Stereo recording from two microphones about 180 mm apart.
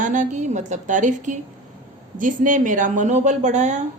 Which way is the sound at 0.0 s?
45° right (ahead or behind).